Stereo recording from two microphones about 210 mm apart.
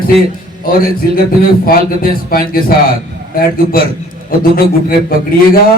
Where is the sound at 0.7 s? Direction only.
45° left (ahead or behind).